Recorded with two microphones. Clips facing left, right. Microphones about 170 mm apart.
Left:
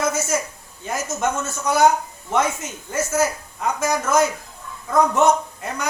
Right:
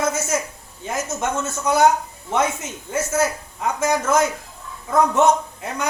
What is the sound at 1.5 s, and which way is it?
A woman's voice, 20° right (ahead or behind).